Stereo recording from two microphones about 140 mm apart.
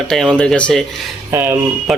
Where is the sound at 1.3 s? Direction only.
15° right (ahead or behind).